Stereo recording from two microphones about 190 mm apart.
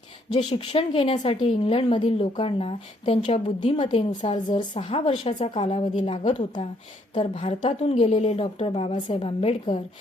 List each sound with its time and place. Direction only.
0.3 s a woman's voice: 30° left (ahead or behind)